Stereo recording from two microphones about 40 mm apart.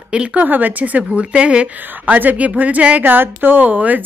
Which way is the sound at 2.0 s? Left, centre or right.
Right.